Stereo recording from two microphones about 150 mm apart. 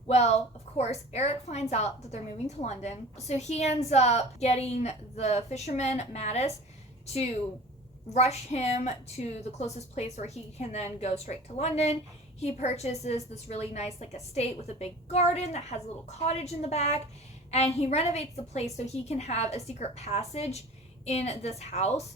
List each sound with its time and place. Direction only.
0.1 s a woman's voice: 45° left (ahead or behind)
8.1 s a woman's voice: 45° left (ahead or behind)